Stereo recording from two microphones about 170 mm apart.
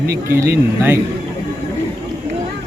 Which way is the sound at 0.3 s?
15° right (ahead or behind).